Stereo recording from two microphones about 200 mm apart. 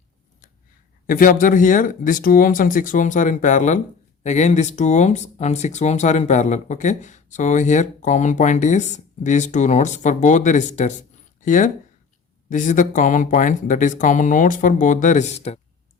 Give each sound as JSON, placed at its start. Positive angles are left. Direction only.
{"t": 1.0, "sound": "speech", "side_deg": 45}